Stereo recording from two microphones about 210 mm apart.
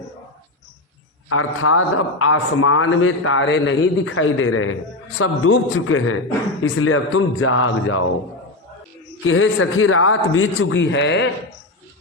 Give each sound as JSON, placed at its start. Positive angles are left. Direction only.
{"t": 1.3, "sound": "a man's voice", "side_deg": 85}
{"t": 9.2, "sound": "a man's voice", "side_deg": 70}